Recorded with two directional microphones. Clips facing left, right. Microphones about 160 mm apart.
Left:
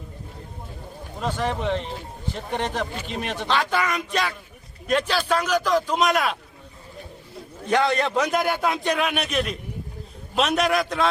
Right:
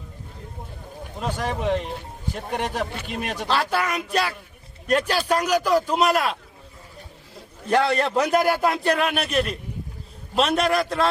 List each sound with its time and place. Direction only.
1.2 s speech: 10° right (ahead or behind)
7.7 s a man's voice: 5° right (ahead or behind)